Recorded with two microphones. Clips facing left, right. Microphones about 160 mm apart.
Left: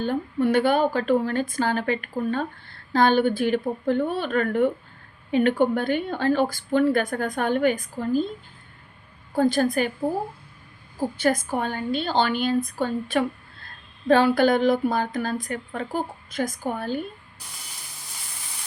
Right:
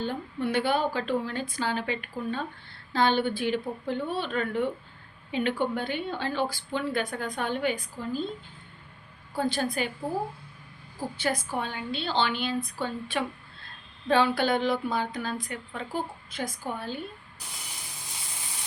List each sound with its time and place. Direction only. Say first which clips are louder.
0.0 s speech: left 7 dB; 50° left (ahead or behind)
9.3 s speech: left 8 dB; 45° left (ahead or behind)
11.2 s speech: left 6 dB; 45° left (ahead or behind)